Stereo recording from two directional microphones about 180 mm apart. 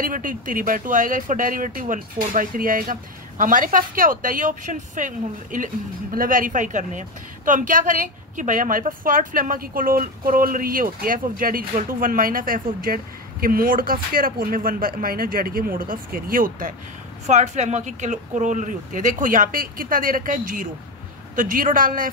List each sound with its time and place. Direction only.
0.0 s a woman's voice: 50° right (ahead or behind)